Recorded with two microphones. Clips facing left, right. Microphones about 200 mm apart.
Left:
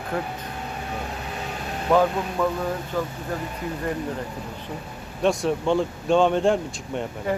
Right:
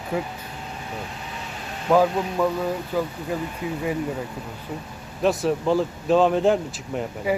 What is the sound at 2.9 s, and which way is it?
Speech, 5° right (ahead or behind).